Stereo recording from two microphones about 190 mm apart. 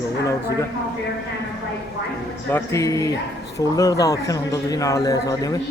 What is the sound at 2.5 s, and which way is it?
A man's voice, 15° left (ahead or behind).